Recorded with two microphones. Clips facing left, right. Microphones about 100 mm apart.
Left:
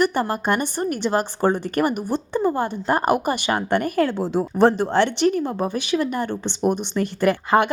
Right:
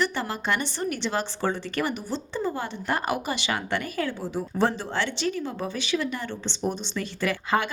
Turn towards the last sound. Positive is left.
turn(degrees=55)  # may be behind; listen again after turning